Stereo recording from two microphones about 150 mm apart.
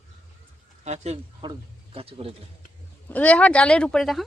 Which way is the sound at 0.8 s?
50° right (ahead or behind).